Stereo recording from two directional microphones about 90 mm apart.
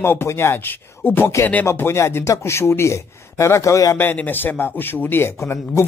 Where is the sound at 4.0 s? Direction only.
20° left (ahead or behind).